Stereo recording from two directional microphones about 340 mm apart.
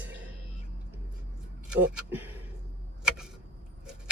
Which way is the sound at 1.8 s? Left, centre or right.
Centre.